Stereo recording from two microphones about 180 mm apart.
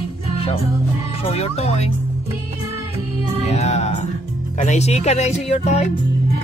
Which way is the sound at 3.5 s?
35° left (ahead or behind).